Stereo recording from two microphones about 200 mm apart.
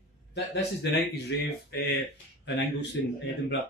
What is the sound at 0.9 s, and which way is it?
Speech, 55° left (ahead or behind).